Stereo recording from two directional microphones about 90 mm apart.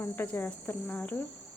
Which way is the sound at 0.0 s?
20° left (ahead or behind).